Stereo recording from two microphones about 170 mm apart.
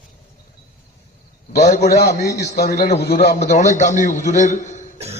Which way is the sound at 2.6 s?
65° left (ahead or behind).